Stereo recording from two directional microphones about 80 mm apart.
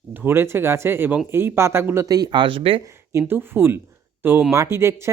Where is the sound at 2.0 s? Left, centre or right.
Right.